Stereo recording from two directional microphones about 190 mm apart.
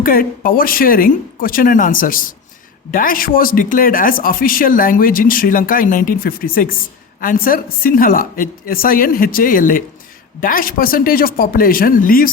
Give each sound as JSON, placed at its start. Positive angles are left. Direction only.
{"t": 0.0, "sound": "speech", "side_deg": 45}